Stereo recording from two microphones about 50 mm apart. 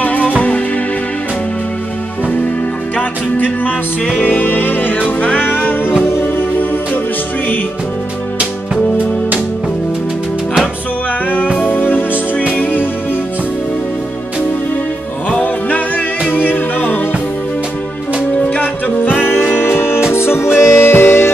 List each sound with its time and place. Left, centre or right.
0.0 s music: left
3.0 s music: left
11.6 s music: left
16.3 s music: left
18.4 s music: left
19.2 s music: left